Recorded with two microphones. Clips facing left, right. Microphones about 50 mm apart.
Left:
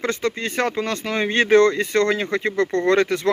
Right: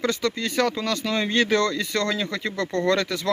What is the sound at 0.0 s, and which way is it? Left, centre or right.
Speech, left.